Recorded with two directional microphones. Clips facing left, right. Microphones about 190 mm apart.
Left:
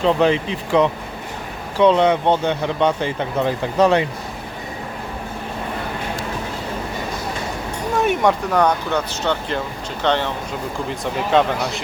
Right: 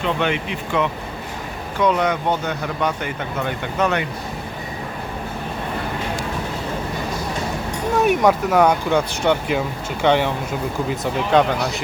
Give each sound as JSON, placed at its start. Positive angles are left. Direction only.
{"t": 0.0, "sound": "speech", "side_deg": 30}
{"t": 7.9, "sound": "speech", "side_deg": 0}